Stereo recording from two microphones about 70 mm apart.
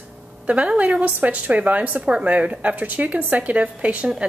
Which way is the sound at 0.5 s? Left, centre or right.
Centre.